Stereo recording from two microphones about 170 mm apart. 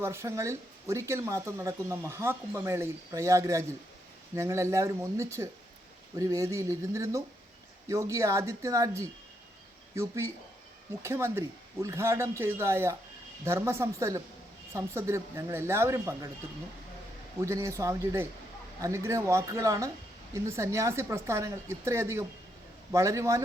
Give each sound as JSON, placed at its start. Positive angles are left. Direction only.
{"t": 0.0, "sound": "speech", "side_deg": -15}
{"t": 17.4, "sound": "speech", "side_deg": -15}